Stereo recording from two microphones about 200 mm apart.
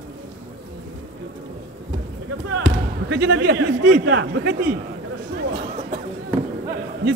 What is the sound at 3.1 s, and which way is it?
A man's voice, 60° right (ahead or behind).